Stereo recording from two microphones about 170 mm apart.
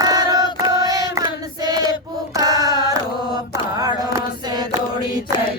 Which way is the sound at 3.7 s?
20° right (ahead or behind).